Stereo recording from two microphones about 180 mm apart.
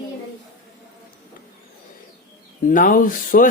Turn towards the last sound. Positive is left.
turn(degrees=50)  # may be behind; listen again after turning